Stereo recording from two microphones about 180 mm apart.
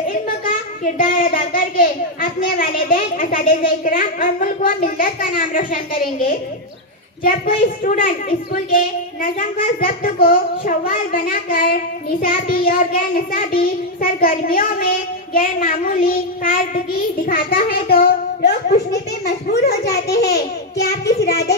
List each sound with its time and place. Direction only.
0.1 s a sound: 50° left (ahead or behind)
2.4 s child singing: 50° left (ahead or behind)
7.2 s child singing: 50° left (ahead or behind)
17.3 s a child's voice: 55° left (ahead or behind)